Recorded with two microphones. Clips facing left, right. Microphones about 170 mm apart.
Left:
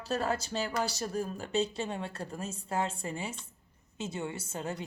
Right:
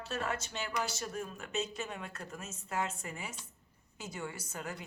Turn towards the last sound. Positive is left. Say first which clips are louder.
# left 5 dB
turn(degrees=25)  # may be behind; listen again after turning